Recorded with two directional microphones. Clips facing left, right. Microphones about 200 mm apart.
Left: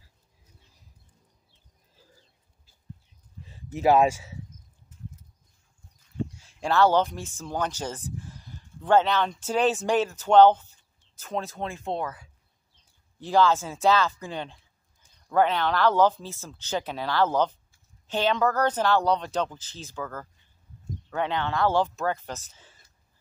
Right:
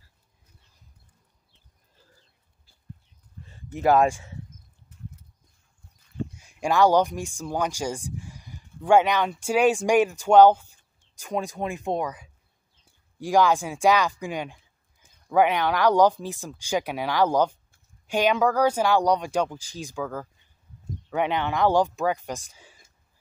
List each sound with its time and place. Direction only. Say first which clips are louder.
3.4 s speech: even; centre (ahead or behind)
4.8 s a sound: right 1 dB; 65° right (ahead or behind)
6.3 s speech: right 2 dB; 15° right (ahead or behind)